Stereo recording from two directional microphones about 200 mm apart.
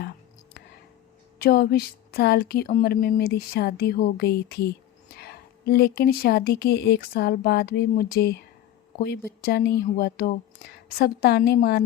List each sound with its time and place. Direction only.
1.4 s speech: 50° left (ahead or behind)